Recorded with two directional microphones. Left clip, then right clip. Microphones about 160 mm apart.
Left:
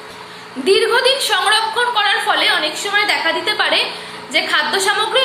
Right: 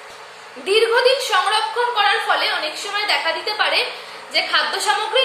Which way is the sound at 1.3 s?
15° right (ahead or behind).